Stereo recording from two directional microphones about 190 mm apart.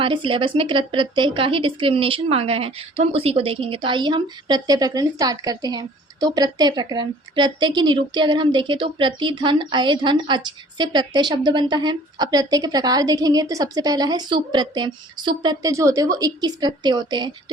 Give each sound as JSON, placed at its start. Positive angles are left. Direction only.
{"t": 0.0, "sound": "speech", "side_deg": -25}